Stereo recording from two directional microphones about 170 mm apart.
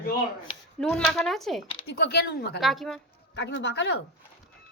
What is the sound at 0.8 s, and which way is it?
Speech, centre (ahead or behind).